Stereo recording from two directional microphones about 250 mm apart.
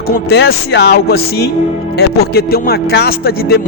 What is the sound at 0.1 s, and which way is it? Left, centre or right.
Speech, left.